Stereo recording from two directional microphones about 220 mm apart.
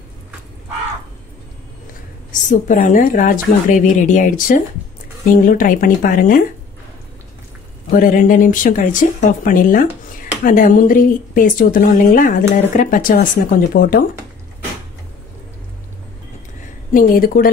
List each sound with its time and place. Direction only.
2.5 s speech: 35° left (ahead or behind)
7.9 s speech: 40° left (ahead or behind)
16.9 s speech: 40° left (ahead or behind)